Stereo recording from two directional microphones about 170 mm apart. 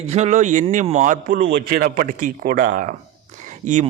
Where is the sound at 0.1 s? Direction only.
40° right (ahead or behind).